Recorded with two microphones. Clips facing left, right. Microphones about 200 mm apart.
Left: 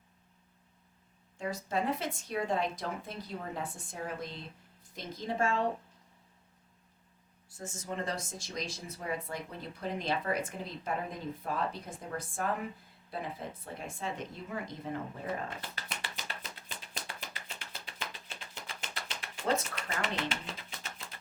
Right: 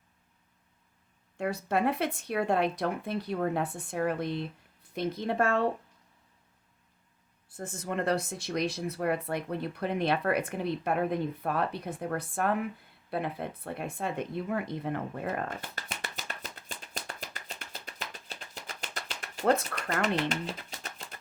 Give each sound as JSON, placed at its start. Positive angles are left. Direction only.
{"t": 1.4, "sound": "speech", "side_deg": -65}
{"t": 7.5, "sound": "speech", "side_deg": -60}
{"t": 15.7, "sound": "a sound", "side_deg": -45}